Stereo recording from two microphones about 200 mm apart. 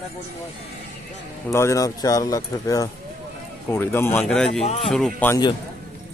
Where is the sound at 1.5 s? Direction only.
15° left (ahead or behind).